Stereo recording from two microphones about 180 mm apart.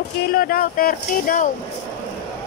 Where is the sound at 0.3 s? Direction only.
50° left (ahead or behind).